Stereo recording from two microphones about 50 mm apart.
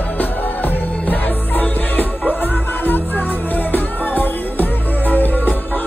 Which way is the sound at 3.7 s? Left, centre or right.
Left.